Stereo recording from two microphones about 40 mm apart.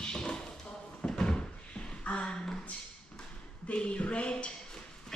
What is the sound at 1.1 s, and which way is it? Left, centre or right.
Door, centre.